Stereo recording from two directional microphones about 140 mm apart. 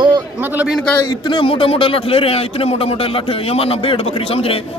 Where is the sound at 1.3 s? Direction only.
40° left (ahead or behind).